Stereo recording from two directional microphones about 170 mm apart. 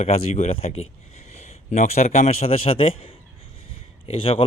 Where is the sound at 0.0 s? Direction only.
35° left (ahead or behind).